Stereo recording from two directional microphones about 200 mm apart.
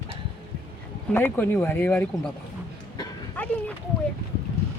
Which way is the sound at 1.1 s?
10° left (ahead or behind).